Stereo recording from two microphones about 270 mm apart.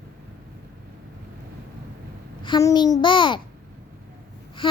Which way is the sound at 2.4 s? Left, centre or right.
Centre.